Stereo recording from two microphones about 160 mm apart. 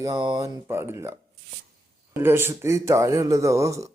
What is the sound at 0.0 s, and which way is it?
A man's voice, 30° right (ahead or behind).